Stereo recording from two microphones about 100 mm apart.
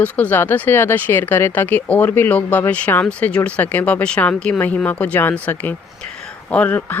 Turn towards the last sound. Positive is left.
turn(degrees=20)  # may be behind; listen again after turning